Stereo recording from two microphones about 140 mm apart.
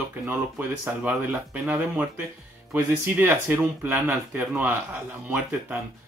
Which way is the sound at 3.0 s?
15° right (ahead or behind).